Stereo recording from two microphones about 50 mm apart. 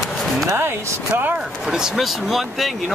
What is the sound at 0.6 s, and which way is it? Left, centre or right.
Speech, right.